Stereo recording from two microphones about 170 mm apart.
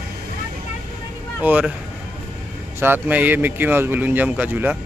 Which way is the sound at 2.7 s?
10° right (ahead or behind).